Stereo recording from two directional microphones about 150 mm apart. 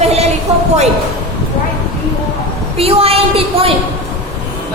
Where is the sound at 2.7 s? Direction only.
40° right (ahead or behind).